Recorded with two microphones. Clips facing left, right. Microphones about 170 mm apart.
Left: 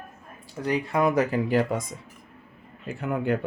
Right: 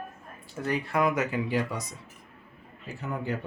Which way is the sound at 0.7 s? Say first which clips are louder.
Left 3 dB; 25° left (ahead or behind).